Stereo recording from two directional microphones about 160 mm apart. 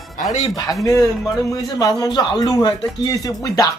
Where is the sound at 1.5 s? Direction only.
20° left (ahead or behind).